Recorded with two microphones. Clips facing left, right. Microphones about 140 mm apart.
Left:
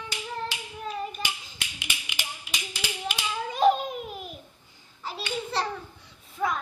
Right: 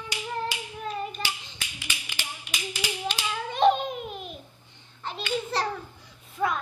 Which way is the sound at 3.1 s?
5° left (ahead or behind).